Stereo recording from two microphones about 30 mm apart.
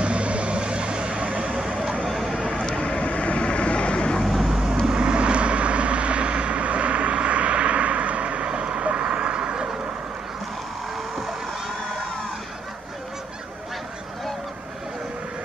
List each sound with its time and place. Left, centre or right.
0.0 s vehicle: right
2.0 s vehicle: centre
2.8 s vehicle: left
4.8 s vehicle: right